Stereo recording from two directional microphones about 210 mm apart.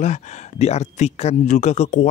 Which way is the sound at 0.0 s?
30° left (ahead or behind).